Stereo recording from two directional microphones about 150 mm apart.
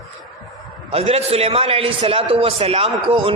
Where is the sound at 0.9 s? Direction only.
45° right (ahead or behind).